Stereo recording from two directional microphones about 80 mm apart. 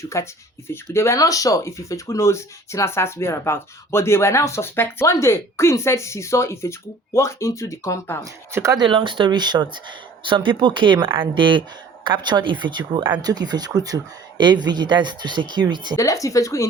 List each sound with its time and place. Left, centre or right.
0.0 s speech: left
8.7 s speech: right
12.0 s speech: right
13.2 s speech: right
14.3 s speech: right
16.0 s speech: left